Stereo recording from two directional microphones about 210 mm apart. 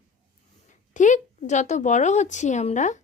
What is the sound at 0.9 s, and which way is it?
Speech, 35° left (ahead or behind).